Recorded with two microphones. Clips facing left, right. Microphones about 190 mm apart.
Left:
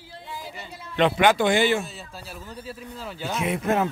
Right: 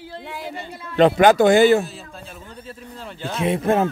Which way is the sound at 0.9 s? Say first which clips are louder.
Right 6 dB; 40° right (ahead or behind).